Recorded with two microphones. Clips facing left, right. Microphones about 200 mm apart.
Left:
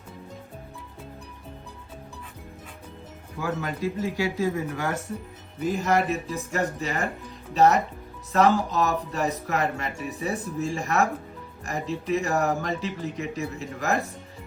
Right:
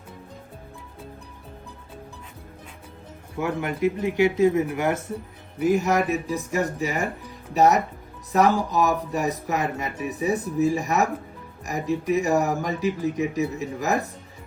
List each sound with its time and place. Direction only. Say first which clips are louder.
3.3 s speech: right 3 dB; 25° right (ahead or behind)